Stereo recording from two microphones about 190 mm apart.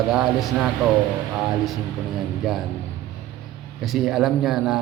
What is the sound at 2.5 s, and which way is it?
Speech, centre (ahead or behind).